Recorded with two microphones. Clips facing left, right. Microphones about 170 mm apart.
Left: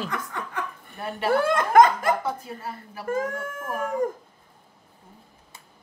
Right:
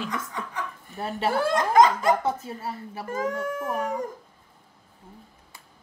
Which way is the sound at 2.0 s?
25° right (ahead or behind).